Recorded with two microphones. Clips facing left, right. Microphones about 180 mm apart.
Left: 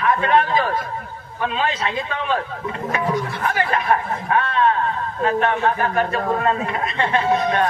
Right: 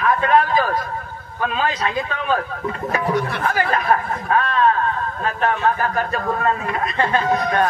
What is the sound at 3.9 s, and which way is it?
A man's voice, 25° left (ahead or behind).